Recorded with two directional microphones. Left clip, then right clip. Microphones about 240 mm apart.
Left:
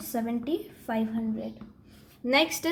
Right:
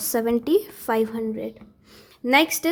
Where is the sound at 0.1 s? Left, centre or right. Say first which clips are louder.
Right 10 dB; right.